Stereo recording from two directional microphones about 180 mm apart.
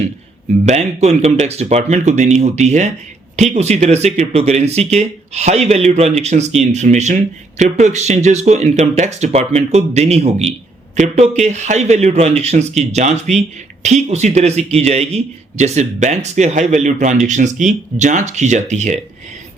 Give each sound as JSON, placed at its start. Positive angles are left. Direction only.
{"t": 0.7, "sound": "a man's voice", "side_deg": -40}